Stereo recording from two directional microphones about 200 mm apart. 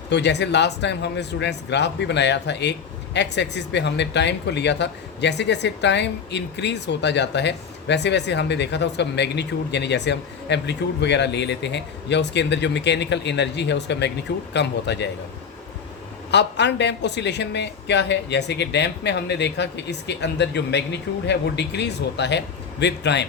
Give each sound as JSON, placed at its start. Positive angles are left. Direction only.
{"t": 0.1, "sound": "speech", "side_deg": 60}
{"t": 16.3, "sound": "speech", "side_deg": 60}